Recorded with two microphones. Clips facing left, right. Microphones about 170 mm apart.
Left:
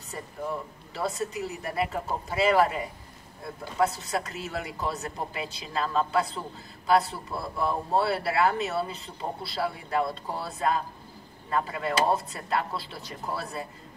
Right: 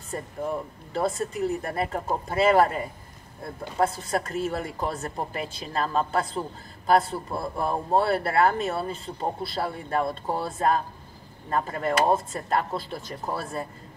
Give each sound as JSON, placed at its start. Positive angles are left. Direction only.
{"t": 0.9, "sound": "a man's voice", "side_deg": -50}
{"t": 3.8, "sound": "a man's voice", "side_deg": -50}